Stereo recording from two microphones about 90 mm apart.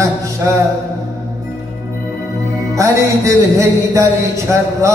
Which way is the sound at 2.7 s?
35° right (ahead or behind).